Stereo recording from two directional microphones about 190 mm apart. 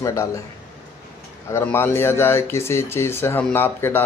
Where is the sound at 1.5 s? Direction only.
10° left (ahead or behind).